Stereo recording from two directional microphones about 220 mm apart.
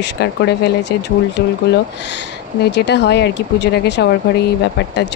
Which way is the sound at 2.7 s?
50° left (ahead or behind).